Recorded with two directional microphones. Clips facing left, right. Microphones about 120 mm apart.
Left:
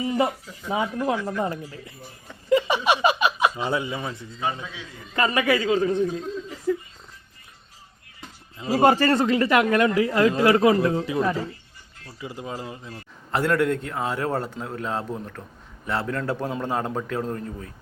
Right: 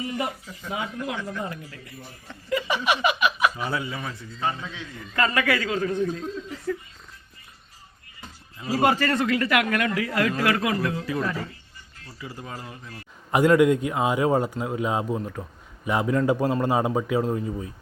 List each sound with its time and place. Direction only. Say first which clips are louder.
0.7 s speech: left 6 dB; 35° left (ahead or behind)
2.5 s speech: left 4 dB; 25° left (ahead or behind)
4.4 s a man's voice: right 1 dB; 10° left (ahead or behind)
5.1 s speech: left 2 dB; 20° left (ahead or behind)
8.5 s speech: left 4 dB; 25° left (ahead or behind)
13.3 s a man's voice: right 4 dB; 10° right (ahead or behind)